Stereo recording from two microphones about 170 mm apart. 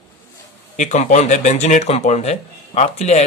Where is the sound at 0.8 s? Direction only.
45° left (ahead or behind).